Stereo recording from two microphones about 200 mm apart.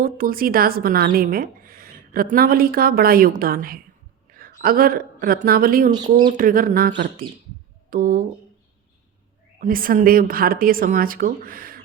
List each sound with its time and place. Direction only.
0.0 s speech: 45° right (ahead or behind)
4.3 s a sound: 45° right (ahead or behind)
5.2 s speech: 45° right (ahead or behind)
9.6 s speech: 45° right (ahead or behind)